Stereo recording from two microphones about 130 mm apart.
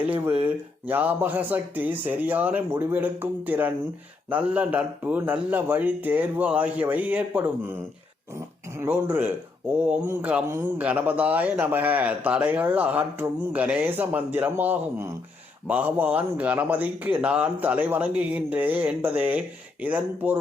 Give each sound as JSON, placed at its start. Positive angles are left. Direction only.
{"t": 0.0, "sound": "a man's voice", "side_deg": -10}
{"t": 8.8, "sound": "a man's voice", "side_deg": -15}